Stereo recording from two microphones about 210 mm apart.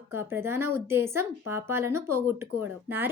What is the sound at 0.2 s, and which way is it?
A woman's voice, 10° right (ahead or behind).